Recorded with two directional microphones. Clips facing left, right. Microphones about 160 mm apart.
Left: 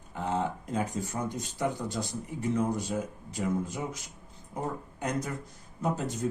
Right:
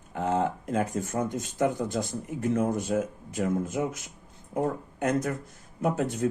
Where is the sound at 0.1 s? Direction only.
60° right (ahead or behind).